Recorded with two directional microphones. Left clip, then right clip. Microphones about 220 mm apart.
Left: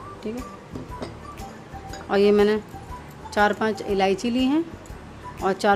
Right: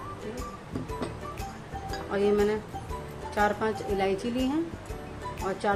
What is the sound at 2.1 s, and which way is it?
Speech, 50° left (ahead or behind).